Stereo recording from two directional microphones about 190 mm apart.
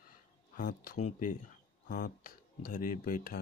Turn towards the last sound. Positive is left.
turn(degrees=50)  # may be behind; listen again after turning